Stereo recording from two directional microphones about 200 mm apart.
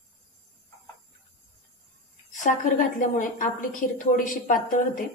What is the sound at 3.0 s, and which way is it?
A woman's voice, 40° left (ahead or behind).